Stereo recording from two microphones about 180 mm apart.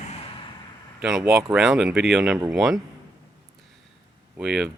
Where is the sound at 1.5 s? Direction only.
Centre (ahead or behind).